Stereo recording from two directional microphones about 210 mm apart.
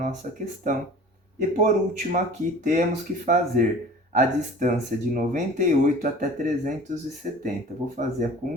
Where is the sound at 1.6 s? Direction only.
35° right (ahead or behind).